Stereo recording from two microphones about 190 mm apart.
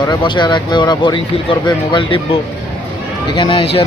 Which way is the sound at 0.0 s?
25° left (ahead or behind).